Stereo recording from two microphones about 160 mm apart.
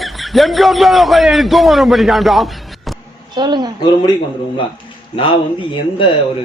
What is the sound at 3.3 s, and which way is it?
Speech, 25° right (ahead or behind).